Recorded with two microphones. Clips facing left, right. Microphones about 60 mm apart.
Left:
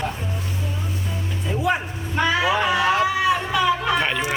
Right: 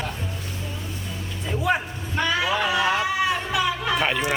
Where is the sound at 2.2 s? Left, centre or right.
Centre.